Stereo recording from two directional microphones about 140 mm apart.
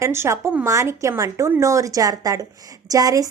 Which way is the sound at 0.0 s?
20° right (ahead or behind).